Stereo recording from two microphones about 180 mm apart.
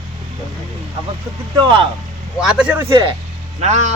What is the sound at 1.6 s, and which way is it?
Speech, 25° right (ahead or behind).